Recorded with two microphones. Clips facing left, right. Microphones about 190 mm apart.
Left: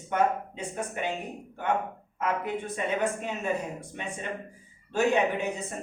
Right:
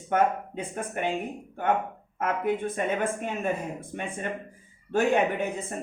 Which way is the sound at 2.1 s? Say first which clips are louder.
Right 3 dB; 50° right (ahead or behind).